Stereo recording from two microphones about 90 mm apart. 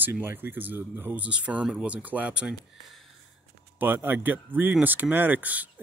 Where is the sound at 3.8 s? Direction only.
20° right (ahead or behind).